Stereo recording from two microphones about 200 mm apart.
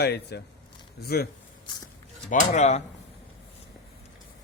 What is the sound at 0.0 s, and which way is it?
Speech, 55° left (ahead or behind).